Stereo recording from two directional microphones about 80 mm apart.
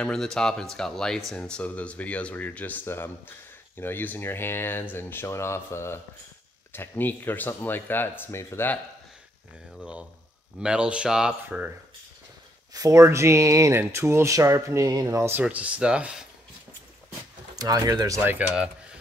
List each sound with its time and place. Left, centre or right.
0.0 s speech: centre; by 8.6 s left
9.8 s speech: centre
11.4 s speech: right
12.7 s speech: right
14.9 s speech: right
15.1 s speech: right
15.4 s speech: centre
17.6 s speech: right
18.2 s speech: right
18.5 s cutlery: centre